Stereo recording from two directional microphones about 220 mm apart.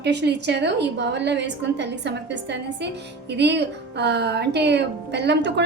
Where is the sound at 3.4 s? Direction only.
50° right (ahead or behind).